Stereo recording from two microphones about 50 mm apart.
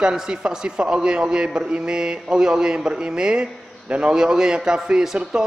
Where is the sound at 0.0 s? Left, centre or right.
Centre.